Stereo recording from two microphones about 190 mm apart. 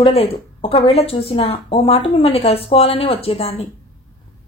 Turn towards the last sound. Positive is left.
turn(degrees=30)  # may be behind; listen again after turning